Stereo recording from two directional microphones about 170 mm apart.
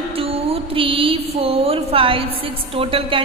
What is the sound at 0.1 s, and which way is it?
Music, 35° right (ahead or behind).